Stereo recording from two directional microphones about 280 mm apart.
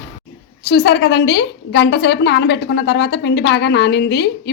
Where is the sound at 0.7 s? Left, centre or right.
Left.